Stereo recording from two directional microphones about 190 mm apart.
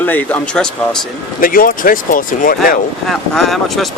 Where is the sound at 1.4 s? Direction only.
45° left (ahead or behind).